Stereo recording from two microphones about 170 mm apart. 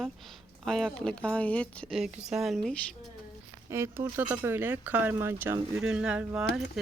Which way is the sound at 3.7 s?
15° right (ahead or behind).